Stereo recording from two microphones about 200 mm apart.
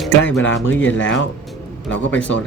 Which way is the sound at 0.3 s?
10° left (ahead or behind).